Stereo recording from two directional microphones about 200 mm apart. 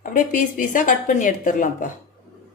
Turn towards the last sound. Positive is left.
turn(degrees=40)  # may be behind; listen again after turning